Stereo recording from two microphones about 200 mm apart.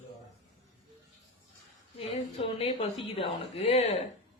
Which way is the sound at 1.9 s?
30° left (ahead or behind).